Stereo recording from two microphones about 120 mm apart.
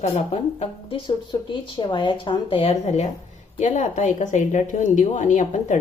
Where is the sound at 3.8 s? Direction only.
85° left.